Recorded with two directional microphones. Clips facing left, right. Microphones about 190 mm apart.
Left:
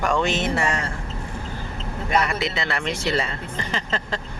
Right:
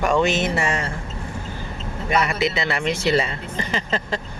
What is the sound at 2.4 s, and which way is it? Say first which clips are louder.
Speech: right 4 dB; 5° right (ahead or behind).